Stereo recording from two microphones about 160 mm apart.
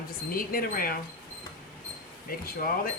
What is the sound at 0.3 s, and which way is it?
Speech, 65° left (ahead or behind).